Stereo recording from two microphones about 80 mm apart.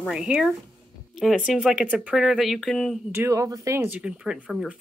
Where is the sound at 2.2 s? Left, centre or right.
Centre.